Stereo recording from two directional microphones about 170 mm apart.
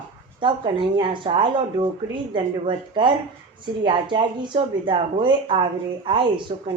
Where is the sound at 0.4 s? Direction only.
30° right (ahead or behind).